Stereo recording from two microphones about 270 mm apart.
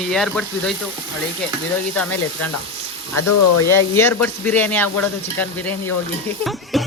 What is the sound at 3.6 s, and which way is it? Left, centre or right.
Speech, centre.